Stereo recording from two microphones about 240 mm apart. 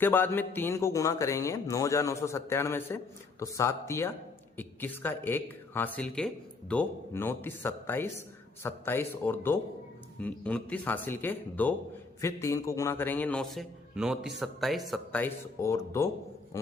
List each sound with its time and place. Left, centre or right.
0.0 s a man's voice: centre